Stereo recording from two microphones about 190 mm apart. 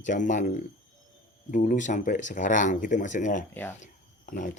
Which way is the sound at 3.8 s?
45° left (ahead or behind).